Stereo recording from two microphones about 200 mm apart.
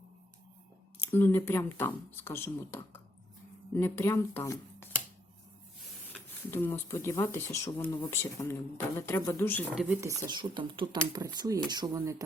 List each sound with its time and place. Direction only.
1.1 s speech: 10° left (ahead or behind)
6.5 s speech: 10° left (ahead or behind)
9.7 s speech: 5° right (ahead or behind)